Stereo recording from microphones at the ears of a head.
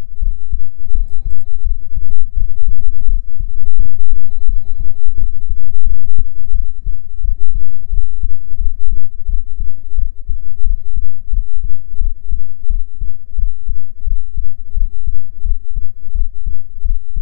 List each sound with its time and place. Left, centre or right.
0.2 s heart sounds: left